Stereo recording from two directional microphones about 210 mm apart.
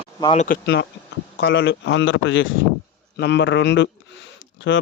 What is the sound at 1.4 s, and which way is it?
A man's voice, 60° left (ahead or behind).